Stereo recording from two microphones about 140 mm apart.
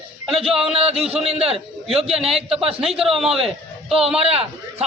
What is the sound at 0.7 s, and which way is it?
Speech, 45° right (ahead or behind).